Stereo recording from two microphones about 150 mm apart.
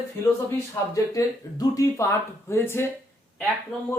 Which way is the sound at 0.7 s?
25° left (ahead or behind).